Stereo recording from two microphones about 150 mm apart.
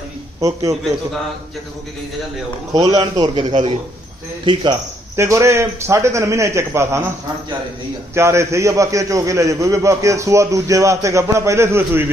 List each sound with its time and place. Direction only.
0.4 s a man's voice: 20° right (ahead or behind)
2.7 s a man's voice: 25° right (ahead or behind)
5.1 s a man's voice: 20° right (ahead or behind)
8.1 s a man's voice: 20° right (ahead or behind)